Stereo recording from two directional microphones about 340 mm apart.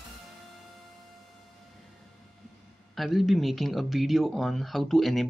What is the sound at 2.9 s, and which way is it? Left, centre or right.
Speech, centre.